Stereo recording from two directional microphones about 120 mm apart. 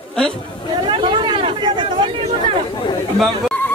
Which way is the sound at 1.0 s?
45° right (ahead or behind).